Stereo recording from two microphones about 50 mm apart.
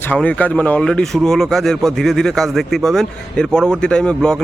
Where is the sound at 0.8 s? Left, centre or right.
Centre.